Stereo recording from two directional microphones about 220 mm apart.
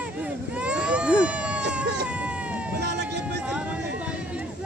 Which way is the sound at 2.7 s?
50° right (ahead or behind).